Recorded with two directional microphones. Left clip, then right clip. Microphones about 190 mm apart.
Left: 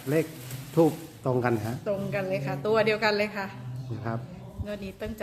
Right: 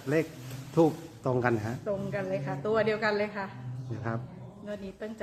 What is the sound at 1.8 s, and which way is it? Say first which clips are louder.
A woman's voice: left 5 dB; 10° left (ahead or behind).